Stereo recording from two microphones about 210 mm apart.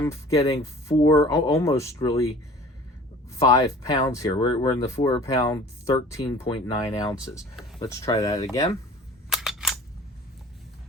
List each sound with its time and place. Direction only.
0.0 s speech: 15° left (ahead or behind)
3.3 s speech: 15° left (ahead or behind)
9.3 s camera: centre (ahead or behind)